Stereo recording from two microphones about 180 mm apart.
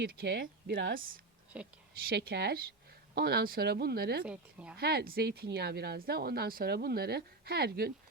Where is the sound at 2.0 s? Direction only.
65° right (ahead or behind).